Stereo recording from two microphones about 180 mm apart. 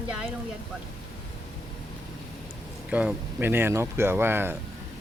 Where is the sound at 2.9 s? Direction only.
5° right (ahead or behind).